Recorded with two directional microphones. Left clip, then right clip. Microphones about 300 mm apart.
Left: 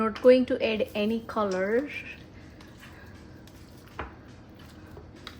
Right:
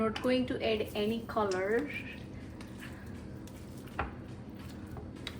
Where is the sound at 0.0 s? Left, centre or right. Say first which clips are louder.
Left 11 dB; left.